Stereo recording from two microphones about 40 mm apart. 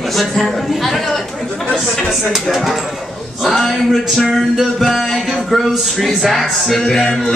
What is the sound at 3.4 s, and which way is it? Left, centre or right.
Music, centre.